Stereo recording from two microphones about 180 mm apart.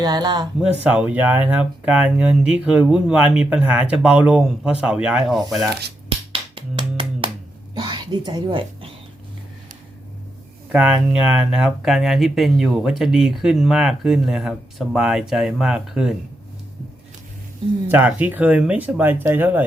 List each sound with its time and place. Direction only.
0.0 s speech: 20° right (ahead or behind)
0.6 s speech: 5° right (ahead or behind)
6.7 s a sound: 25° right (ahead or behind)
7.8 s speech: 25° right (ahead or behind)
10.7 s speech: 5° right (ahead or behind)
17.8 s speech: 10° right (ahead or behind)